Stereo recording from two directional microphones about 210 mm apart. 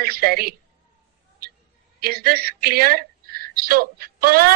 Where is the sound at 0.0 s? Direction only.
45° right (ahead or behind).